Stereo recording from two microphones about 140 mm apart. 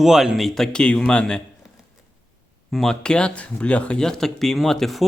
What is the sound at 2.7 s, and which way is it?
Speech, 5° left (ahead or behind).